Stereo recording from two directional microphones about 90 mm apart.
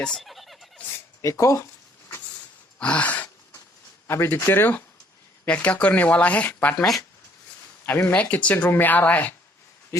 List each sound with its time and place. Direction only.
0.0 s a sound: 5° left (ahead or behind)
1.2 s speech: 35° left (ahead or behind)
2.7 s a sound: 15° left (ahead or behind)
4.0 s speech: 25° left (ahead or behind)
7.9 s speech: 20° left (ahead or behind)
9.9 s speech: 30° left (ahead or behind)